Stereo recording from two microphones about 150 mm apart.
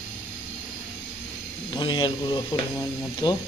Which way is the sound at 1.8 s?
30° left (ahead or behind).